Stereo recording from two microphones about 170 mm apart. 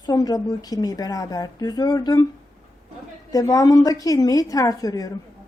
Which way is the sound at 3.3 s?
20° left (ahead or behind).